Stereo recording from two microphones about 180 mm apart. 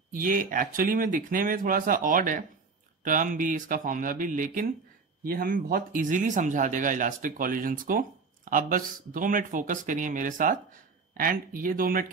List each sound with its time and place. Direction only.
0.1 s speech: 50° right (ahead or behind)